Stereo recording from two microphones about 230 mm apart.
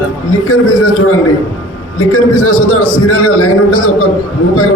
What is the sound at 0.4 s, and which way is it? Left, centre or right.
Speech, left.